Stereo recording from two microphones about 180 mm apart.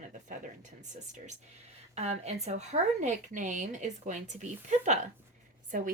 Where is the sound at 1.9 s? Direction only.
35° right (ahead or behind).